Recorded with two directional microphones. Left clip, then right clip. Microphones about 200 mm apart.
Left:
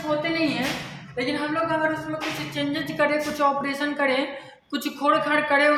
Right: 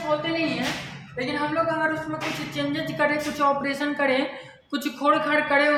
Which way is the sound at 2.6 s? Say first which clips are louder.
Left 1 dB; 15° left (ahead or behind).